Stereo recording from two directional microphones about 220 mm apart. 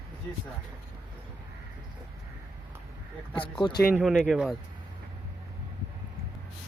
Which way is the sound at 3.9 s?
5° right (ahead or behind).